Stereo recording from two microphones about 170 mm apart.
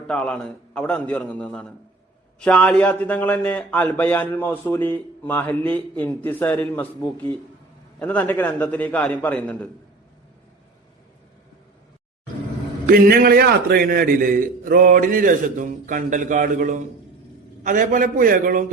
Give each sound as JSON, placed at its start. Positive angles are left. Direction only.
{"t": 0.1, "sound": "a man's voice", "side_deg": 5}
{"t": 7.9, "sound": "a man's voice", "side_deg": 10}
{"t": 12.8, "sound": "a man's voice", "side_deg": -60}